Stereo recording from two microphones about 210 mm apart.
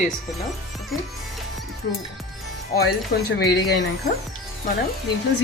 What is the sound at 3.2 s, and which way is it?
Speech, 50° left (ahead or behind).